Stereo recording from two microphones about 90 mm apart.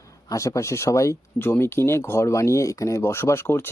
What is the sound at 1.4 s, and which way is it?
Speech, 25° left (ahead or behind).